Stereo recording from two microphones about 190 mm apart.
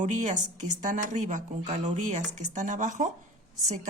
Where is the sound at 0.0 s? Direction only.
40° right (ahead or behind).